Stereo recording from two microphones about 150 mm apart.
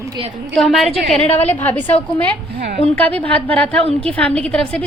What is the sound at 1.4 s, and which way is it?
A woman's voice, 10° left (ahead or behind).